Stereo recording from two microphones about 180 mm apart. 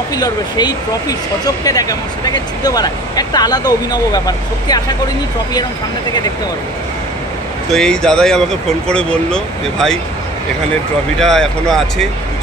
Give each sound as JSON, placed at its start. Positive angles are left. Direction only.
{"t": 0.1, "sound": "speech", "side_deg": 20}
{"t": 7.7, "sound": "speech", "side_deg": 5}
{"t": 11.1, "sound": "speech", "side_deg": 5}